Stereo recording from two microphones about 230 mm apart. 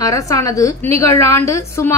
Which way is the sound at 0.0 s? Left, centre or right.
Centre.